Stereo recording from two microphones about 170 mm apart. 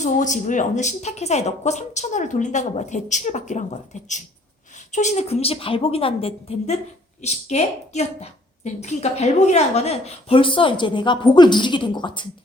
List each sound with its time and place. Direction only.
0.0 s speech: 45° left (ahead or behind)
4.9 s a woman's voice: 45° left (ahead or behind); by 12.3 s 25° left (ahead or behind)